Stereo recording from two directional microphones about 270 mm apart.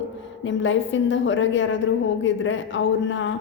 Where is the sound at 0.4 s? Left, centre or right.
Left.